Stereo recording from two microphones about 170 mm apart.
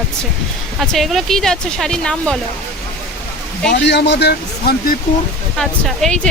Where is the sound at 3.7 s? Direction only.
85° left; by 5.0 s 65° left (ahead or behind).